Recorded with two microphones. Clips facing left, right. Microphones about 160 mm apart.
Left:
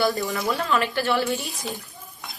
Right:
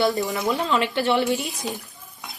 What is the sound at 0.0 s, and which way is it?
Speech, 20° right (ahead or behind).